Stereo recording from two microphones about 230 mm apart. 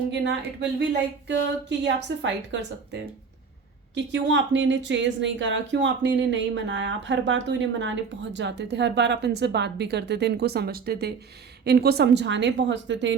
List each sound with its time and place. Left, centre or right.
0.1 s a woman's voice: right